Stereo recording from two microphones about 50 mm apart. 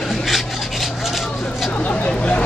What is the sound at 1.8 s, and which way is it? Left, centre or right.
Vehicle, left.